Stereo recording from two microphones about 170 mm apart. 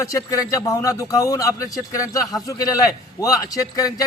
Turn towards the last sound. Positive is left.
turn(degrees=20)  # may be behind; listen again after turning